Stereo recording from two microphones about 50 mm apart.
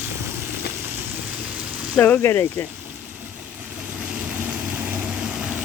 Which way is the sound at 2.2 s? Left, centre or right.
Left.